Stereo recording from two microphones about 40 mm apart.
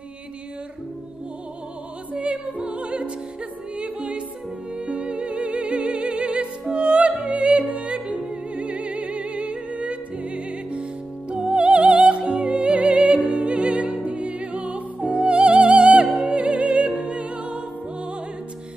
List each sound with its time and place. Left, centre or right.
2.1 s music: right
7.3 s yodeling: right
8.2 s music: right